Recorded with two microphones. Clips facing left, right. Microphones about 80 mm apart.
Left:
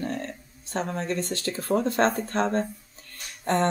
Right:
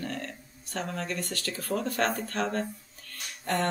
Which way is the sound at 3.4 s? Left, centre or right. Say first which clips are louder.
Left 5 dB; left.